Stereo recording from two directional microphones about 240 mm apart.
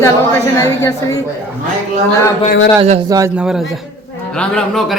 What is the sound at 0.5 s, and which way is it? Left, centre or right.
Speech, centre.